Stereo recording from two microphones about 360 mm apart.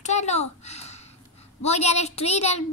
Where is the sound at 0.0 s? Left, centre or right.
Centre.